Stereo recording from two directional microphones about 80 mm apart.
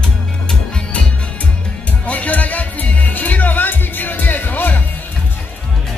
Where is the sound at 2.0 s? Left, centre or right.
Centre.